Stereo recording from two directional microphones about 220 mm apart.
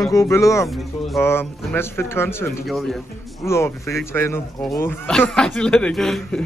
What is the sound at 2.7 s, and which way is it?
Speech, centre (ahead or behind).